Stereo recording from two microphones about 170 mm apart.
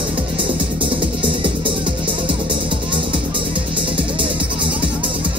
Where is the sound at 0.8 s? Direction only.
30° right (ahead or behind).